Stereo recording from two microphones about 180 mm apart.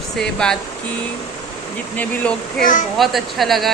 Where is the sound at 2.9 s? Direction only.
Centre (ahead or behind).